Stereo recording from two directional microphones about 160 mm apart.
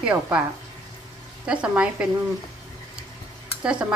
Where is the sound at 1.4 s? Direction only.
5° right (ahead or behind).